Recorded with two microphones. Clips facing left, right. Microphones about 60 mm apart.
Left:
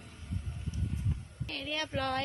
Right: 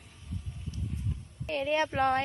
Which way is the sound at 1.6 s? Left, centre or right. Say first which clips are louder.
Right 8 dB; right.